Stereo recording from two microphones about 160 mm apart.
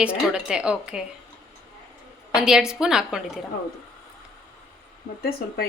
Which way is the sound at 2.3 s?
5° right (ahead or behind).